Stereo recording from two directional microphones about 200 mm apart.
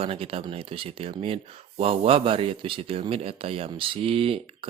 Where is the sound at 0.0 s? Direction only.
30° right (ahead or behind).